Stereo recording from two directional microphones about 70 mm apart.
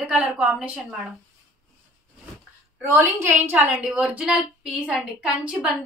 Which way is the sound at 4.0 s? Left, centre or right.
Centre.